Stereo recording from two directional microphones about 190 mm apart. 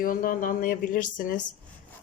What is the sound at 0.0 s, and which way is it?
Speech, 50° left (ahead or behind).